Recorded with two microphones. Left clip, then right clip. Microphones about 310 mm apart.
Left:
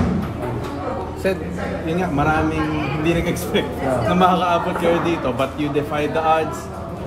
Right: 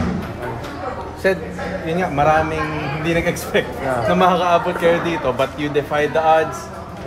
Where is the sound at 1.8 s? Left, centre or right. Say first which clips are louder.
Right 4 dB; right.